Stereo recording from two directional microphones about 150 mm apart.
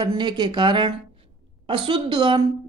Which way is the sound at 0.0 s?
30° right (ahead or behind).